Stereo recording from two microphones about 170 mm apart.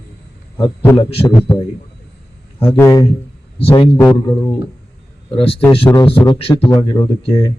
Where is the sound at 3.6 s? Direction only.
35° left (ahead or behind).